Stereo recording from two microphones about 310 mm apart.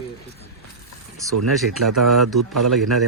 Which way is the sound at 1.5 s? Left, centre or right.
Centre.